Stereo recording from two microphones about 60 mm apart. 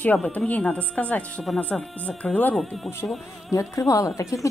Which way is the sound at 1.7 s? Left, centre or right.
Centre.